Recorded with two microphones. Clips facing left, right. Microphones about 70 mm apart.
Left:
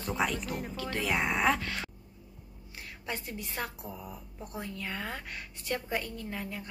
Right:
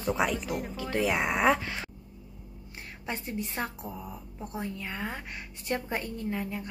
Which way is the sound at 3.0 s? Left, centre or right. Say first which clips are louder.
Right 4 dB; right.